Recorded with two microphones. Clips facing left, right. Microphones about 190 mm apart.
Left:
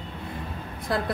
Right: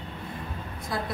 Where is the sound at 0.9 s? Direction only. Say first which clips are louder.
Left 5 dB; 65° left (ahead or behind).